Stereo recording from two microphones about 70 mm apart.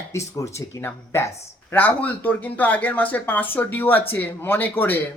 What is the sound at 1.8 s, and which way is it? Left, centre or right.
Speech, left.